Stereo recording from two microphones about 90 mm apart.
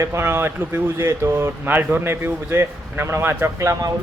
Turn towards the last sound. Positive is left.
turn(degrees=-30)  # may be behind; listen again after turning